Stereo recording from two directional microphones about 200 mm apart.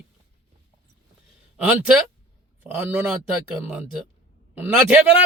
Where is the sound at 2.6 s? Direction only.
10° right (ahead or behind).